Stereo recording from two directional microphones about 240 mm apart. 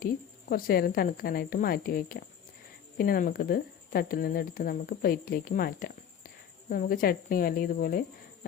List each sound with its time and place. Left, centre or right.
0.5 s speech: left